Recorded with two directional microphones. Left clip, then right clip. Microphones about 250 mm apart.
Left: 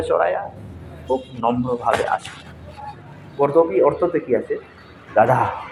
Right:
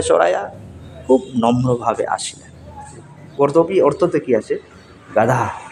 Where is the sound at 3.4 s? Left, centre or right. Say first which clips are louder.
Right 2 dB; right.